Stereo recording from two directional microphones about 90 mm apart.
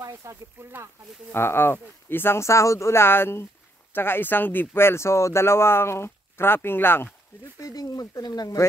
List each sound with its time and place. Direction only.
0.0 s speech: 35° right (ahead or behind)
1.3 s speech: 25° left (ahead or behind)
7.5 s speech: 45° left (ahead or behind)